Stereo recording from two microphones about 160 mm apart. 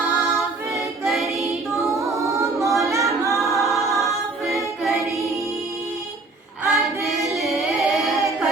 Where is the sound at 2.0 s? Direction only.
20° right (ahead or behind).